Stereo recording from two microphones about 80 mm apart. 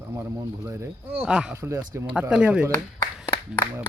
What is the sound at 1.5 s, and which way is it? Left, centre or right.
Speech, right.